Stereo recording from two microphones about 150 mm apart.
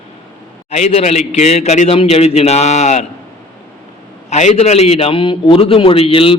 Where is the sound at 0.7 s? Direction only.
45° left (ahead or behind).